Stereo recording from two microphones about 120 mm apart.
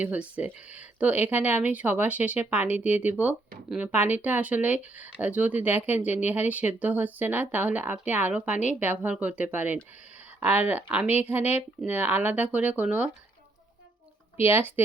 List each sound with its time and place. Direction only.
0.0 s speech: 10° right (ahead or behind)
14.4 s speech: 20° right (ahead or behind)